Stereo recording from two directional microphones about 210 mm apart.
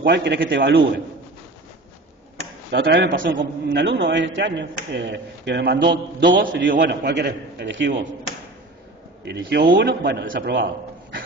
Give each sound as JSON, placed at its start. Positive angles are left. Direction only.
{"t": 0.0, "sound": "a man's voice", "side_deg": -55}
{"t": 2.7, "sound": "a man's voice", "side_deg": -55}
{"t": 9.2, "sound": "a man's voice", "side_deg": -55}